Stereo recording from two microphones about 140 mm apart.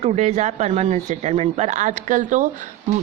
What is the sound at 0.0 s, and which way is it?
Speech, 50° right (ahead or behind).